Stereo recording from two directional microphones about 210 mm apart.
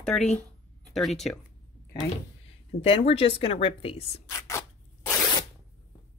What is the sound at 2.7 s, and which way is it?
A woman's voice, 25° left (ahead or behind).